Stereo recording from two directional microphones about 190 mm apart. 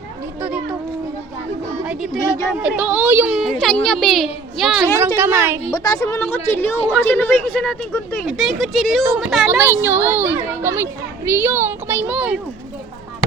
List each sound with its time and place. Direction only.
0.4 s speech: 5° right (ahead or behind)
1.8 s speech: 5° right (ahead or behind)
4.9 s speech: 15° right (ahead or behind)
5.7 s a woman's voice: 20° left (ahead or behind); by 12.4 s 5° right (ahead or behind)